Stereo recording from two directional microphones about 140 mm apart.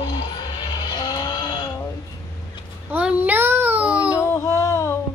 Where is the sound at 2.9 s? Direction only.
10° right (ahead or behind).